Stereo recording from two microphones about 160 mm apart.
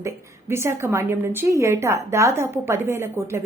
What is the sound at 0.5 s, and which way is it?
A woman's voice, 15° right (ahead or behind).